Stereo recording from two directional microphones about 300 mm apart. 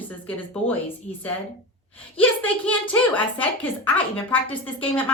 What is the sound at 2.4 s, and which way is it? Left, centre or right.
A woman's voice, centre.